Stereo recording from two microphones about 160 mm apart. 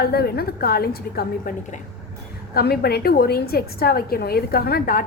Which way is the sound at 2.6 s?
80° left.